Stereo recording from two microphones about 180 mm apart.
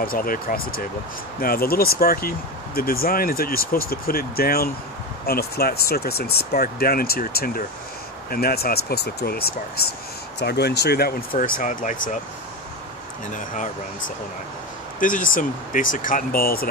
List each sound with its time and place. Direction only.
0.0 s speech: 55° left (ahead or behind)
15.0 s speech: 50° left (ahead or behind)